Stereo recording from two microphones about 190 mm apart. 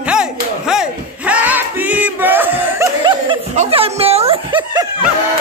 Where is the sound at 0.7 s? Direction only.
5° right (ahead or behind).